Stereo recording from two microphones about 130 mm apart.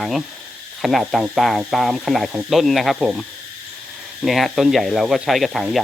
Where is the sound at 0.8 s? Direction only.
Centre (ahead or behind).